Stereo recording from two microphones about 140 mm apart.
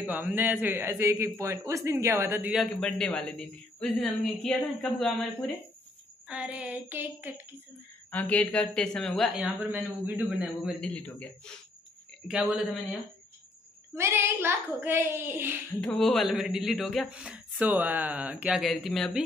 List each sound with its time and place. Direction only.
0.0 s a woman's voice: 10° right (ahead or behind)
2.5 s a woman's voice: 5° left (ahead or behind)
6.2 s speech: 10° right (ahead or behind)
8.1 s a woman's voice: 10° left (ahead or behind)
9.7 s speech: 10° right (ahead or behind)
10.4 s a woman's voice: centre (ahead or behind)
12.3 s speech: 5° right (ahead or behind)
13.9 s speech: 20° right (ahead or behind)
15.8 s a woman's voice: 5° left (ahead or behind)
17.1 s speech: 10° right (ahead or behind)